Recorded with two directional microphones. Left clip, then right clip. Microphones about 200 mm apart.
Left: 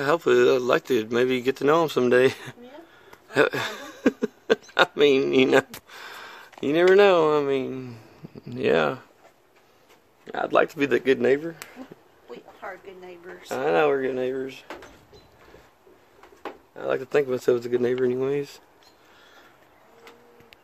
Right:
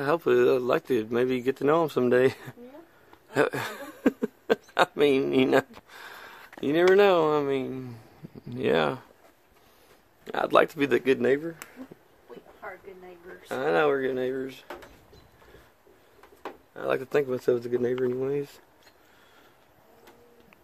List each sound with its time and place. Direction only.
0.0 s speech: centre (ahead or behind)
3.3 s a sound: centre (ahead or behind)
4.7 s speech: 5° right (ahead or behind)
10.2 s speech: 25° right (ahead or behind)
10.8 s speech: 5° right (ahead or behind)
13.5 s speech: 5° left (ahead or behind)
16.7 s speech: 20° right (ahead or behind)
17.1 s speech: 5° right (ahead or behind)